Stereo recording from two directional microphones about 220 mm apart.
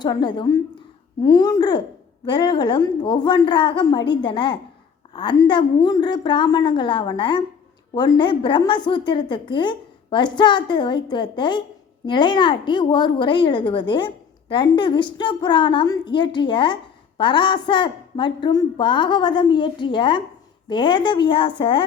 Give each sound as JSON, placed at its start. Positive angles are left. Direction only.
{"t": 0.0, "sound": "a woman's voice", "side_deg": 20}